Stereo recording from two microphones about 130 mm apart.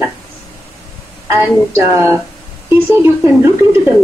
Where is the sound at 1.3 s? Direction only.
20° right (ahead or behind).